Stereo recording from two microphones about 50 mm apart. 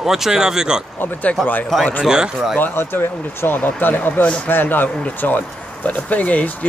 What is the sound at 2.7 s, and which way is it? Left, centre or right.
Speech, left.